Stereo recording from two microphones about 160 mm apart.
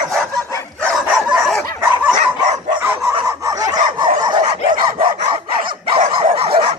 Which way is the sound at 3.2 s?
20° right (ahead or behind).